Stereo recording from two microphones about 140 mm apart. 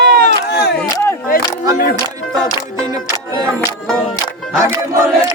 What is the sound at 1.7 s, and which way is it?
Speech, 70° left (ahead or behind).